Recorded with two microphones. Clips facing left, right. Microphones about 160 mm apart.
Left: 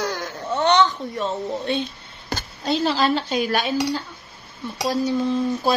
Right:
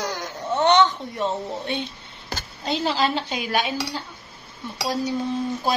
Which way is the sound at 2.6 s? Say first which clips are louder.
Left 3 dB; 15° right (ahead or behind).